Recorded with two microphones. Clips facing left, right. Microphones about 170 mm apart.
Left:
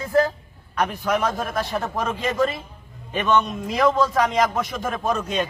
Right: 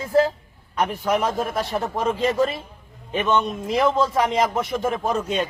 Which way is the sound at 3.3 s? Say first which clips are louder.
Left 1 dB; 25° right (ahead or behind).